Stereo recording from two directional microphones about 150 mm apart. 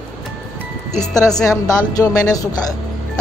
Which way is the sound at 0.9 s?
25° left (ahead or behind).